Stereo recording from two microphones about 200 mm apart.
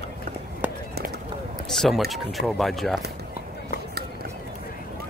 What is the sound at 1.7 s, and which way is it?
Run, centre (ahead or behind).